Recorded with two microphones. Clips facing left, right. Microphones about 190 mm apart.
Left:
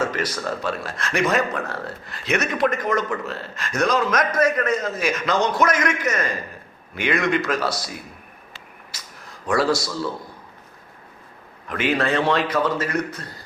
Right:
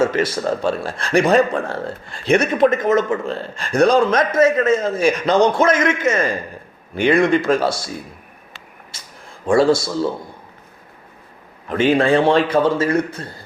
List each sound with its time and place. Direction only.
0.0 s a man's voice: 25° right (ahead or behind)
8.9 s a sound: 25° right (ahead or behind)
11.7 s a man's voice: 30° right (ahead or behind)